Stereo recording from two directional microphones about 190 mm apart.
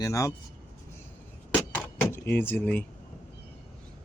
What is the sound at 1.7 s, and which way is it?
Door, 10° left (ahead or behind).